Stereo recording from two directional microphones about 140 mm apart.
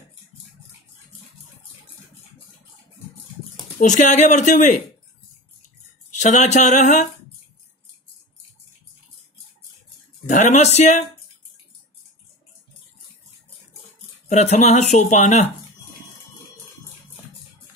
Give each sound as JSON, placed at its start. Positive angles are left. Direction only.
{"t": 3.8, "sound": "speech", "side_deg": 60}
{"t": 6.0, "sound": "speech", "side_deg": 60}
{"t": 10.2, "sound": "speech", "side_deg": 60}
{"t": 14.3, "sound": "speech", "side_deg": 55}